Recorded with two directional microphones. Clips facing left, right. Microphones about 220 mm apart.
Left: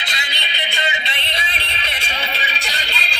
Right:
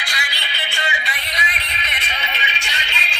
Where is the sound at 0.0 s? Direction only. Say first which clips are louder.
Even; 20° left (ahead or behind).